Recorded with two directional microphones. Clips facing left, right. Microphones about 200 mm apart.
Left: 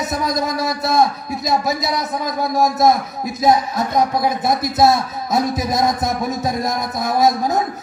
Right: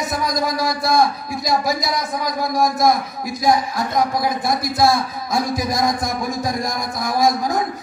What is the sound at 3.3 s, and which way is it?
A man's voice, 25° left (ahead or behind).